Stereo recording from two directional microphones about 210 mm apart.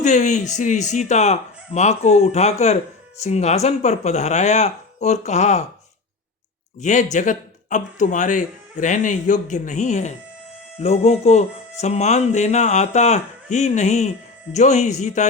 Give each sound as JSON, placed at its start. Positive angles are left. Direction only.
{"t": 0.0, "sound": "speech", "side_deg": 35}
{"t": 6.7, "sound": "speech", "side_deg": 35}